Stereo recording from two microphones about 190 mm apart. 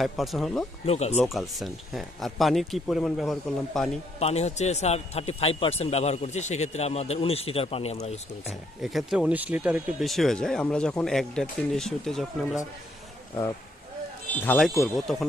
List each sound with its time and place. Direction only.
0.0 s speech: centre (ahead or behind)
0.8 s a man's voice: 35° left (ahead or behind)
1.2 s speech: centre (ahead or behind)
4.2 s a man's voice: 35° left (ahead or behind)
8.5 s speech: centre (ahead or behind)
14.3 s speech: 10° left (ahead or behind)